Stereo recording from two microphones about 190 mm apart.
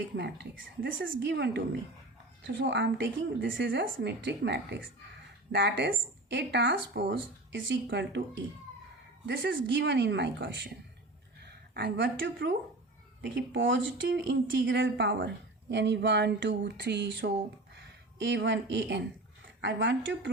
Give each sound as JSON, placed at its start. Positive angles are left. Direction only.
{"t": 0.2, "sound": "a woman's voice", "side_deg": -75}
{"t": 9.2, "sound": "a woman's voice", "side_deg": -70}
{"t": 11.7, "sound": "a woman's voice", "side_deg": -60}